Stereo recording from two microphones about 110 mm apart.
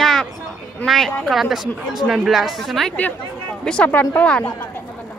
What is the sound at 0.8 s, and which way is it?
A woman's voice, centre (ahead or behind).